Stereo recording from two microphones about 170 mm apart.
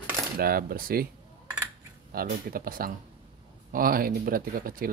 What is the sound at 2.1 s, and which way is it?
Speech, 60° right (ahead or behind).